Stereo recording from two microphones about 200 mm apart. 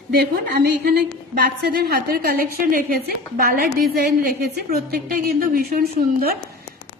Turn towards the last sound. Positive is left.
turn(degrees=-50)  # may be behind; listen again after turning